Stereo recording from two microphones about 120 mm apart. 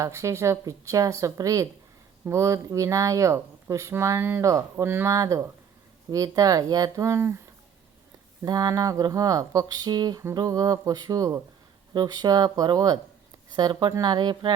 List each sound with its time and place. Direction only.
0.0 s speech: 25° right (ahead or behind)
8.4 s speech: 30° right (ahead or behind)